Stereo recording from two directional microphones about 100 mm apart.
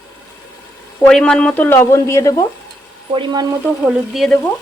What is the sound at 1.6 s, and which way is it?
Speech, 25° left (ahead or behind).